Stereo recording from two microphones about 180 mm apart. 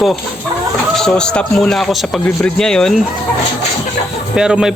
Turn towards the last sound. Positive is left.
turn(degrees=-5)  # may be behind; listen again after turning